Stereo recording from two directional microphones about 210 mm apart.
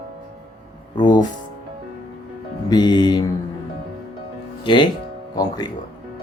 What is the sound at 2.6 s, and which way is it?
Speech, 20° left (ahead or behind).